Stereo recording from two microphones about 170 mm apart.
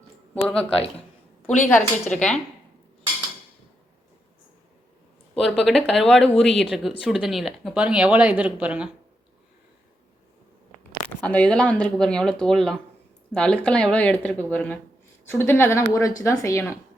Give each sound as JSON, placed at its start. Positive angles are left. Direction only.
{"t": 0.4, "sound": "speech", "side_deg": 5}
{"t": 5.4, "sound": "speech", "side_deg": 0}
{"t": 11.2, "sound": "speech", "side_deg": 10}